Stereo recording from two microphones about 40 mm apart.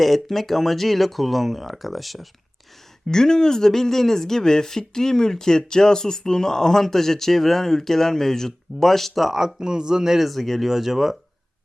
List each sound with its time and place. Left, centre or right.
0.0 s speech: centre
3.1 s speech: centre
9.6 s a man's voice: centre
10.2 s speech: centre
10.7 s a man's voice: centre